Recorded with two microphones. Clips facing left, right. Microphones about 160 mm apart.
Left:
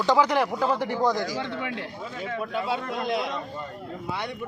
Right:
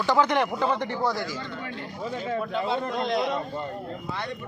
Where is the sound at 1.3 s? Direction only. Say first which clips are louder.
Left 5 dB; 75° left (ahead or behind).